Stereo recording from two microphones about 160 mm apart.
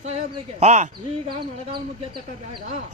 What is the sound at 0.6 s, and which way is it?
Speech, 45° right (ahead or behind).